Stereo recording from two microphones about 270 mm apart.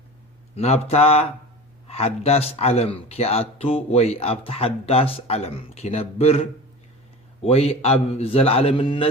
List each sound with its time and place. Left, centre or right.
0.5 s speech: left